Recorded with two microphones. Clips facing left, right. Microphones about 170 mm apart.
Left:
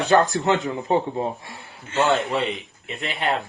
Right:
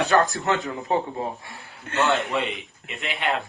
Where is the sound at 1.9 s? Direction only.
65° right (ahead or behind).